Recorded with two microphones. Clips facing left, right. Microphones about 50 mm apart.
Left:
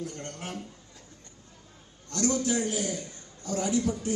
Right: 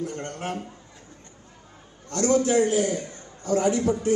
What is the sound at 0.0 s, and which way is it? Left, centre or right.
Speech, right.